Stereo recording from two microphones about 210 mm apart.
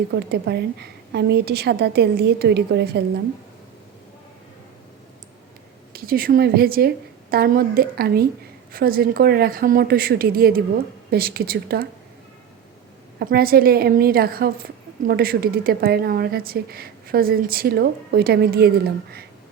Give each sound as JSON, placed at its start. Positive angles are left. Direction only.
{"t": 0.1, "sound": "a woman's voice", "side_deg": -50}
{"t": 5.9, "sound": "a woman's voice", "side_deg": -45}
{"t": 13.1, "sound": "a woman's voice", "side_deg": -45}